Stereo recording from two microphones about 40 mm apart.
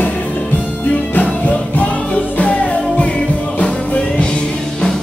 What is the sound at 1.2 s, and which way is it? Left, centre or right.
Music, left.